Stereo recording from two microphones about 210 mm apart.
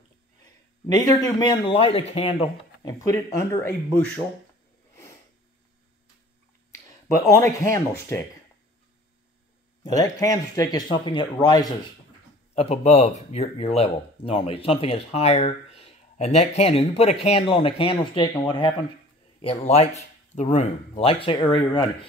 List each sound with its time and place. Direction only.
0.9 s a man's voice: 20° left (ahead or behind)
7.2 s a man's voice: 15° left (ahead or behind)
10.2 s a man's voice: 15° left (ahead or behind)
12.5 s speech: 30° left (ahead or behind)